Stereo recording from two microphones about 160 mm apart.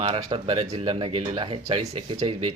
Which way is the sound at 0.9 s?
30° right (ahead or behind).